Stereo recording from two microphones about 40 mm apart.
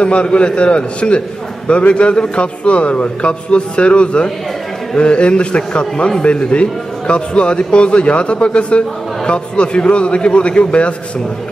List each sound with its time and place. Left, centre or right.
0.0 s a man's voice: left